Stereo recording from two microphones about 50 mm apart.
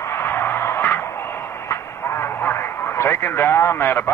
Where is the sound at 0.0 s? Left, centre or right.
Left.